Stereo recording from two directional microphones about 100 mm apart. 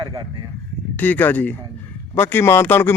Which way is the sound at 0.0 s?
50° right (ahead or behind).